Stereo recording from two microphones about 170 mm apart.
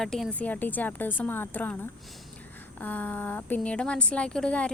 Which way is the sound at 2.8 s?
10° left (ahead or behind).